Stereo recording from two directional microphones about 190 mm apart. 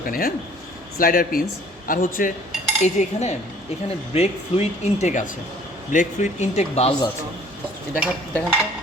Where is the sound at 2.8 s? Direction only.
35° left (ahead or behind).